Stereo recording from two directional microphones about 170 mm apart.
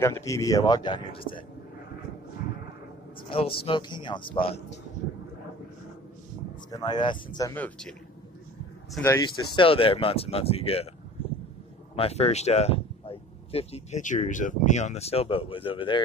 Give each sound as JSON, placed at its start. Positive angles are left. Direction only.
{"t": 0.0, "sound": "a man's voice", "side_deg": 20}
{"t": 3.3, "sound": "a man's voice", "side_deg": 30}
{"t": 6.7, "sound": "a man's voice", "side_deg": 25}
{"t": 7.5, "sound": "speech", "side_deg": 10}
{"t": 9.0, "sound": "speech", "side_deg": 15}
{"t": 9.6, "sound": "speech", "side_deg": 30}
{"t": 11.9, "sound": "speech", "side_deg": 35}